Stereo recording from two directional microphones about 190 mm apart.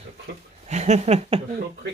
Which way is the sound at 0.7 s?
35° right (ahead or behind).